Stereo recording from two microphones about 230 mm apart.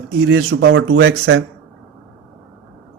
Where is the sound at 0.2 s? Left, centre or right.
Right.